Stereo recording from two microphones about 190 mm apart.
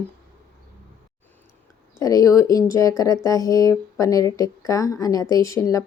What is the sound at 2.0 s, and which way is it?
Speech, 20° left (ahead or behind).